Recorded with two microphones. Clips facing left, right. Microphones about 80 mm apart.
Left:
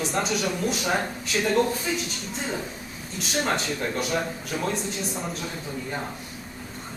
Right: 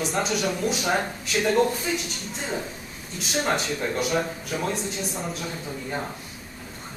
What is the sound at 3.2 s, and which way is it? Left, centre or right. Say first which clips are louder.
A man's voice: right 1 dB; centre.